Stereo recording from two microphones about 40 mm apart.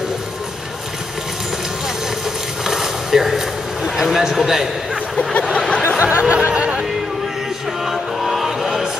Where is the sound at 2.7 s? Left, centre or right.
Centre.